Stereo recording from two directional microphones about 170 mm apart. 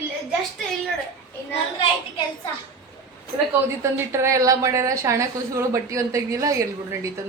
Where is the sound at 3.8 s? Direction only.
15° right (ahead or behind).